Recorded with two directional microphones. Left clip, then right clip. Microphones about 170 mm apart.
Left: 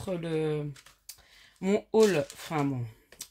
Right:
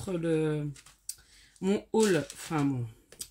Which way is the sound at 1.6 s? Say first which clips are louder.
Left 4 dB; 45° left (ahead or behind).